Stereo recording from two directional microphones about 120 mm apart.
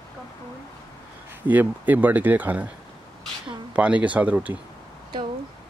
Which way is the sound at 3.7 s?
10° right (ahead or behind).